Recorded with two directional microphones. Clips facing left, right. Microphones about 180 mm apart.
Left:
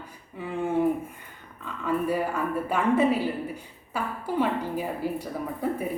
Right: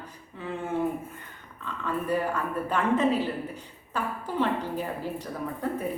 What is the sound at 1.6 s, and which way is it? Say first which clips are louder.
A woman's voice: left 4 dB; 10° left (ahead or behind).